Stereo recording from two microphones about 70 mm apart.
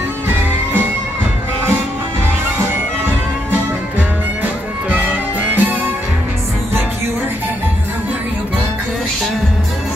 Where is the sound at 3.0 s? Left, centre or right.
Right.